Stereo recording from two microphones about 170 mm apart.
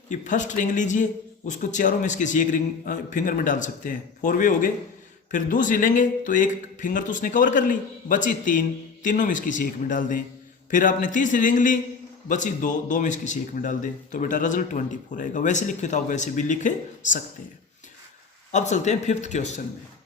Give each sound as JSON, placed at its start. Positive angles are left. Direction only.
{"t": 0.1, "sound": "speech", "side_deg": 45}
{"t": 18.5, "sound": "speech", "side_deg": 45}